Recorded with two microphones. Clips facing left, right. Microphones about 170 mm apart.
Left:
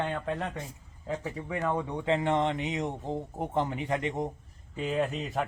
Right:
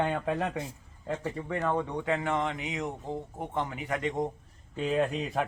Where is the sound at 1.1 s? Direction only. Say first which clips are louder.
Right 1 dB; 5° left (ahead or behind).